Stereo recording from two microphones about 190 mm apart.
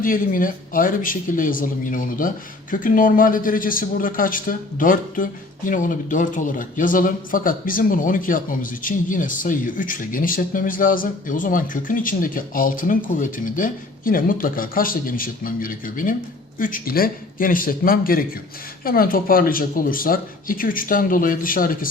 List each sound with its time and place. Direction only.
0.0 s speech: 45° left (ahead or behind)